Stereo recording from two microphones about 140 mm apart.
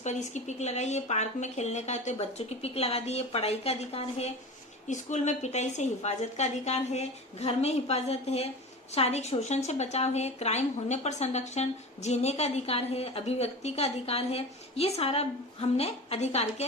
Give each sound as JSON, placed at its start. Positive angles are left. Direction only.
{"t": 0.0, "sound": "speech", "side_deg": 55}